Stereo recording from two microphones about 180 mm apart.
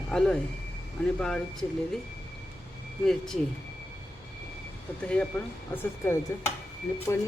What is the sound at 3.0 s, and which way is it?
Speech, 5° left (ahead or behind).